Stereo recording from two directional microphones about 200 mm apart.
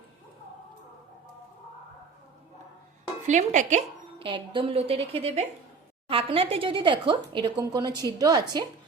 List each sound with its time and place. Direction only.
3.2 s a woman's voice: 35° right (ahead or behind); by 8.6 s 20° right (ahead or behind)